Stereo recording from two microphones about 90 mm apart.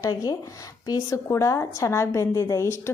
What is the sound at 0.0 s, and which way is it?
A woman's voice, 40° left (ahead or behind).